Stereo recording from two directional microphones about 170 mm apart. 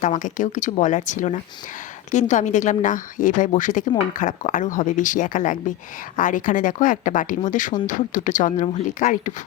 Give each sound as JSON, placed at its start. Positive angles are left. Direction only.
{"t": 0.0, "sound": "speech", "side_deg": 50}